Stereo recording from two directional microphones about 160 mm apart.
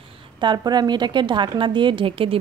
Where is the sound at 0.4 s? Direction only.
25° right (ahead or behind).